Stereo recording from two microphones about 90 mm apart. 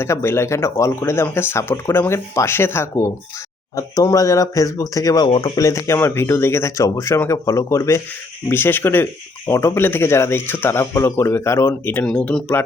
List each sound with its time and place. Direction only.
0.0 s speech: 30° left (ahead or behind); by 5.3 s 45° left (ahead or behind)
5.3 s speech: 70° left (ahead or behind)
5.5 s speech: 35° left (ahead or behind)
12.0 s speech: 10° left (ahead or behind)